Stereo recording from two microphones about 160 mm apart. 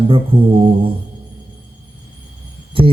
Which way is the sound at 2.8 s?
35° right (ahead or behind).